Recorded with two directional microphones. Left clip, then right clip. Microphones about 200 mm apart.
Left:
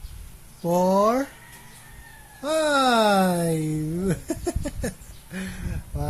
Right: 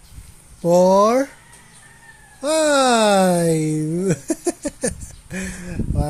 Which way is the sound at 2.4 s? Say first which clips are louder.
Right 5 dB; 40° right (ahead or behind).